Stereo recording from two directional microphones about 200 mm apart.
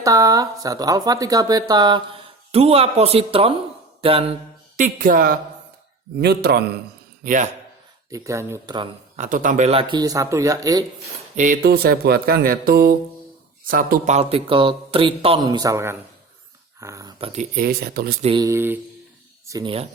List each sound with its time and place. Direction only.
0.0 s speech: 15° right (ahead or behind)
4.8 s speech: 45° right (ahead or behind)
7.3 s a man's voice: 40° right (ahead or behind)
8.1 s speech: 15° right (ahead or behind)
9.1 s speech: 40° right (ahead or behind); by 10.8 s 15° right (ahead or behind)
11.3 s speech: 40° right (ahead or behind)
17.5 s speech: 50° right (ahead or behind)
18.2 s speech: 30° right (ahead or behind)
18.4 s speech: 10° right (ahead or behind)